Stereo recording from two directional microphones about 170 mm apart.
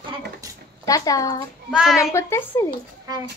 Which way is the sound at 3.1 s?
20° right (ahead or behind).